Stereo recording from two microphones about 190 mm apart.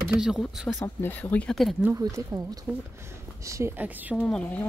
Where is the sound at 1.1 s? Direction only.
10° left (ahead or behind).